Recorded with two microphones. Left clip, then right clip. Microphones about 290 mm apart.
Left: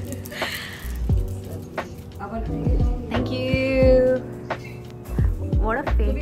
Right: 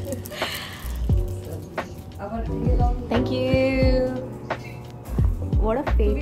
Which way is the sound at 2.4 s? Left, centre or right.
Centre.